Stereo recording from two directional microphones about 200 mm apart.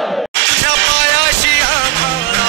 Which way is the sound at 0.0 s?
Centre (ahead or behind).